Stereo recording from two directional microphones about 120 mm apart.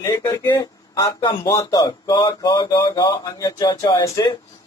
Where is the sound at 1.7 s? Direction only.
30° left (ahead or behind).